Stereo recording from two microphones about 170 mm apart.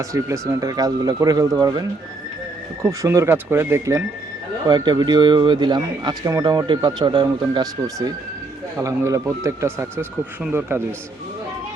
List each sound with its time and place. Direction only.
0.0 s speech: 20° right (ahead or behind)
2.8 s speech: 15° right (ahead or behind)